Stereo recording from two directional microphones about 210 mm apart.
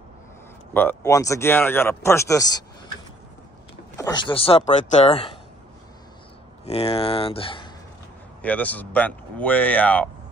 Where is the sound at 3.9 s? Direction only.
20° left (ahead or behind).